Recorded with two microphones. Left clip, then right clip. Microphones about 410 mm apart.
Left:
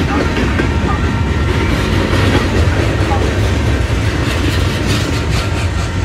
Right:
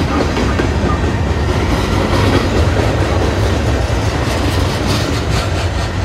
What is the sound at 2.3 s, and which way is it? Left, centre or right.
Train, right.